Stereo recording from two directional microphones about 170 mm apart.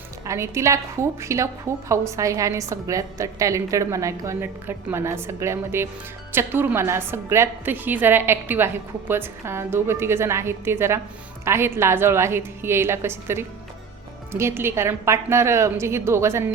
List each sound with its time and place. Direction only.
0.3 s a woman's voice: 15° right (ahead or behind)